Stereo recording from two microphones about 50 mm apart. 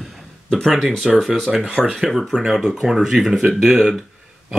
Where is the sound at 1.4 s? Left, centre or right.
Centre.